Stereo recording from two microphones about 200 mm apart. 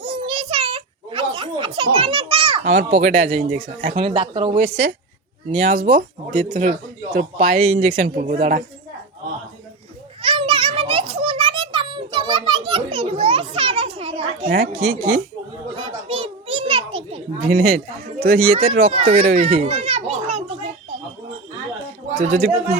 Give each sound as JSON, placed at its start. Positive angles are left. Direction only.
{"t": 0.0, "sound": "a sound", "side_deg": -25}
{"t": 3.8, "sound": "speech", "side_deg": -30}
{"t": 10.2, "sound": "children playing", "side_deg": -25}
{"t": 15.7, "sound": "children playing", "side_deg": -30}
{"t": 17.6, "sound": "speech", "side_deg": -45}
{"t": 18.9, "sound": "speech", "side_deg": -30}
{"t": 19.4, "sound": "children playing", "side_deg": -30}
{"t": 22.1, "sound": "speech", "side_deg": -35}